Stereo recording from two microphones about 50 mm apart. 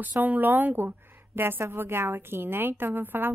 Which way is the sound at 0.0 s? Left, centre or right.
Right.